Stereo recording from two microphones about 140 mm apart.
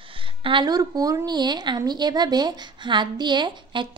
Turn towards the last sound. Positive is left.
turn(degrees=-35)  # may be behind; listen again after turning